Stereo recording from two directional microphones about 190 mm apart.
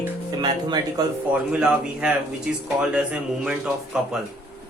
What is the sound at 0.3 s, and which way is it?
Speech, 20° right (ahead or behind).